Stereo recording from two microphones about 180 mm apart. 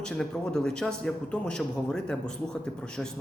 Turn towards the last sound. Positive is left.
turn(degrees=5)  # may be behind; listen again after turning